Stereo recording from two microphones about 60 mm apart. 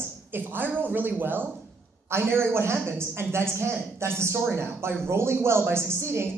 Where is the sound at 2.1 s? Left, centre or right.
Right.